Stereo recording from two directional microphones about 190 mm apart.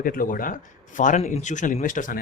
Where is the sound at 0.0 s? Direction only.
50° left (ahead or behind).